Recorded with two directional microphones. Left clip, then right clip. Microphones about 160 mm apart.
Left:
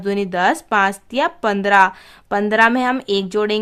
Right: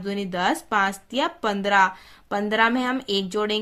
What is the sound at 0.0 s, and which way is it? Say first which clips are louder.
Speech: left 7 dB; 40° left (ahead or behind).